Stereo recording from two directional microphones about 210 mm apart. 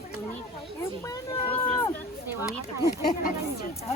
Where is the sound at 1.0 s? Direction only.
15° left (ahead or behind).